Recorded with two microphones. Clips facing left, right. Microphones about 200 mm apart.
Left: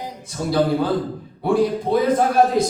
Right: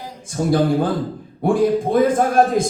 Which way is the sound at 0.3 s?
50° right (ahead or behind).